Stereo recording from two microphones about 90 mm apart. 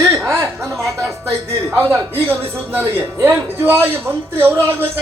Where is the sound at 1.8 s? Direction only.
25° right (ahead or behind).